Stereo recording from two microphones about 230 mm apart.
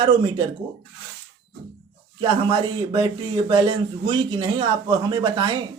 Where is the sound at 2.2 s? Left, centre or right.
Right.